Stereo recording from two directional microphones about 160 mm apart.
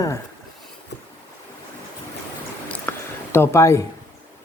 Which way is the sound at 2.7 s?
10° left (ahead or behind).